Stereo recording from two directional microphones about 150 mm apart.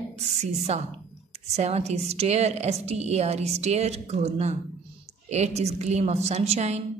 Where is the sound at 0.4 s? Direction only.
50° right (ahead or behind).